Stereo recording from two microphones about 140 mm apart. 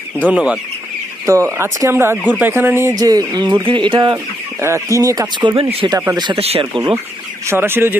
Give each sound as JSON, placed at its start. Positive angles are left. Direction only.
{"t": 0.3, "sound": "speech", "side_deg": -5}
{"t": 1.2, "sound": "speech", "side_deg": -20}
{"t": 3.0, "sound": "speech", "side_deg": -25}
{"t": 4.6, "sound": "speech", "side_deg": -20}
{"t": 5.6, "sound": "speech", "side_deg": -45}
{"t": 6.1, "sound": "speech", "side_deg": -30}
{"t": 7.4, "sound": "speech", "side_deg": -15}